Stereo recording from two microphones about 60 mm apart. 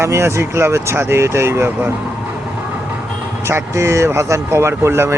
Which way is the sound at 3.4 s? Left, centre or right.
Right.